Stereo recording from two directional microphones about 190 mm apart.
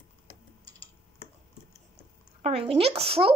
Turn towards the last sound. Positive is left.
turn(degrees=-30)  # may be behind; listen again after turning